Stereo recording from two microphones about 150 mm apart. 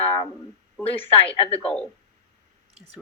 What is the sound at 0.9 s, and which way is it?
Speech, 40° left (ahead or behind).